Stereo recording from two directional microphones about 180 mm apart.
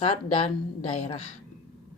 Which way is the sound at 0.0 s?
30° left (ahead or behind).